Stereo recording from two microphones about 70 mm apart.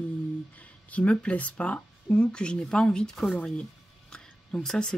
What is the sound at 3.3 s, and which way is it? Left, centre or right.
Music, centre.